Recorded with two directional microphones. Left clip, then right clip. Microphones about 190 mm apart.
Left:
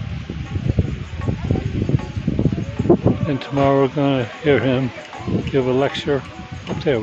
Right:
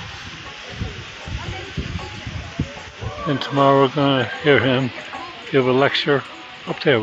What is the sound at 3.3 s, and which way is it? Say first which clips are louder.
Speech: right 4 dB; 10° left (ahead or behind).